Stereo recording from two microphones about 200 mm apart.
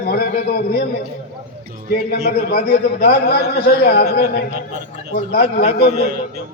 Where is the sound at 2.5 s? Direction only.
50° left (ahead or behind).